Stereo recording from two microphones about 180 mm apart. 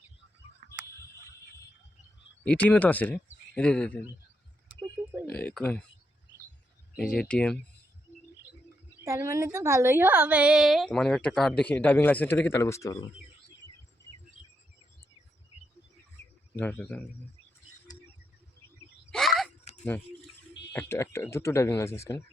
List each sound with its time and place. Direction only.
2.4 s speech: 10° left (ahead or behind)
5.0 s a sound: 10° right (ahead or behind)
5.4 s speech: 10° left (ahead or behind)
7.0 s a woman's voice: 5° left (ahead or behind)
9.0 s a woman's voice: 15° right (ahead or behind); by 13.1 s 20° left (ahead or behind)
16.6 s speech: 10° left (ahead or behind)
19.1 s a sound: centre (ahead or behind)
19.7 s dog: 35° left (ahead or behind)
20.9 s speech: 15° left (ahead or behind)